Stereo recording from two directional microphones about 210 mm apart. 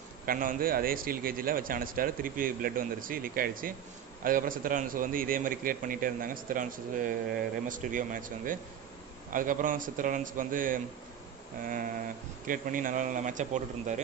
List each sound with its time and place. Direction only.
0.2 s a man's voice: 40° right (ahead or behind)